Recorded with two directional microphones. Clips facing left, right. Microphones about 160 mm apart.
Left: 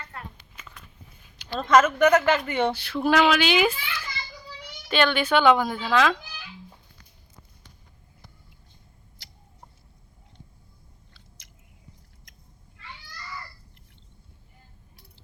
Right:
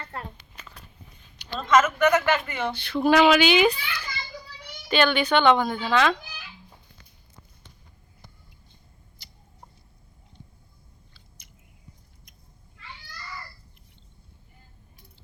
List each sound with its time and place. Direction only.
0.0 s a sound: 35° right (ahead or behind)
1.6 s a man's voice: 35° left (ahead or behind)
2.7 s speech: 5° left (ahead or behind)
11.4 s biting: 80° left
12.3 s cat: 90° left